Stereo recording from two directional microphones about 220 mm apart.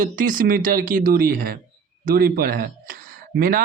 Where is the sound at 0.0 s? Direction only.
40° right (ahead or behind).